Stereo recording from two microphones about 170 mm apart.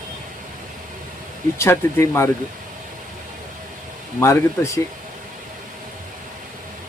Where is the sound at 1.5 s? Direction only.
15° left (ahead or behind).